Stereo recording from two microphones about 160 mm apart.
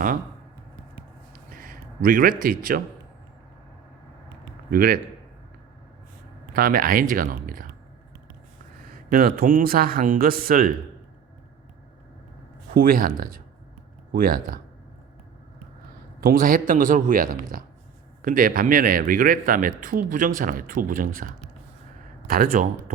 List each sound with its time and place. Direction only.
1.3 s a sound: 60° right (ahead or behind)
2.4 s speech: 65° right (ahead or behind)
4.7 s a man's voice: 65° right (ahead or behind)
6.5 s speech: 60° right (ahead or behind)
9.0 s speech: 65° right (ahead or behind)
12.7 s speech: 60° right (ahead or behind)
16.2 s speech: 60° right (ahead or behind)
22.3 s speech: 65° right (ahead or behind)